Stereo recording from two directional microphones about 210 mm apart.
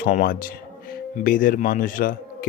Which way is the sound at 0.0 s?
40° left (ahead or behind).